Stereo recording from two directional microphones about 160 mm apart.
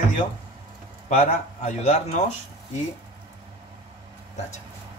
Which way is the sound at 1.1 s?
45° left (ahead or behind).